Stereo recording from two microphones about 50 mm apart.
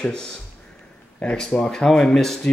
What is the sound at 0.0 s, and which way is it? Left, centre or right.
Speech, centre.